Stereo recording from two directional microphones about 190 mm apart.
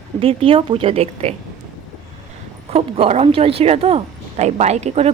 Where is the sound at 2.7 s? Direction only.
35° right (ahead or behind).